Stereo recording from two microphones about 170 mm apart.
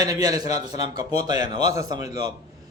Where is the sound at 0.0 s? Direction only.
20° right (ahead or behind).